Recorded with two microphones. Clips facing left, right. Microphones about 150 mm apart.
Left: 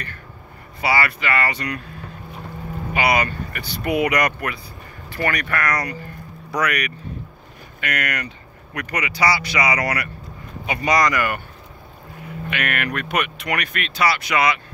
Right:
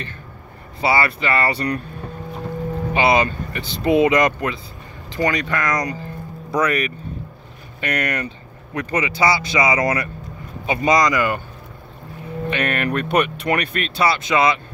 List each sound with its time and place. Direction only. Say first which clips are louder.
0.7 s speech: right 2 dB; 25° right (ahead or behind)
2.9 s speech: right 3 dB; 25° right (ahead or behind)
12.4 s speech: right 4 dB; 30° right (ahead or behind)